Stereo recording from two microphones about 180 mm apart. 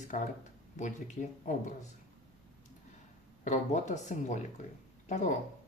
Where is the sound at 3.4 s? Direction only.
40° left (ahead or behind).